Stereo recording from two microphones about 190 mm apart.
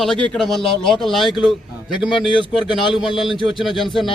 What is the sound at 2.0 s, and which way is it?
Speech, 25° left (ahead or behind).